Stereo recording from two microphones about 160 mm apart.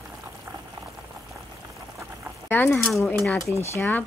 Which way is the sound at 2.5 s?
10° left (ahead or behind).